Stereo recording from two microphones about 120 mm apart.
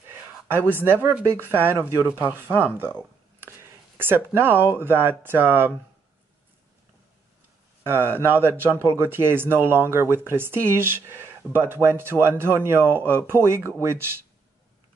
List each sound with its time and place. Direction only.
0.1 s speech: 20° right (ahead or behind)
2.8 s a sound: 20° right (ahead or behind)
4.0 s speech: 20° right (ahead or behind)
7.8 s speech: 20° right (ahead or behind)